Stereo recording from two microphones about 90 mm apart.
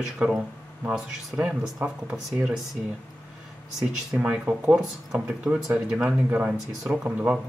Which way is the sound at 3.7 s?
10° right (ahead or behind).